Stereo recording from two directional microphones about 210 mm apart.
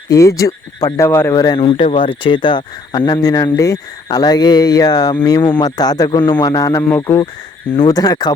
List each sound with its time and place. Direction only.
0.1 s speech: 15° left (ahead or behind)